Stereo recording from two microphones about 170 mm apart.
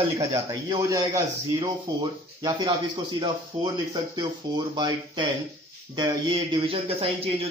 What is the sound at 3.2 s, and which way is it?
Speech, 25° right (ahead or behind).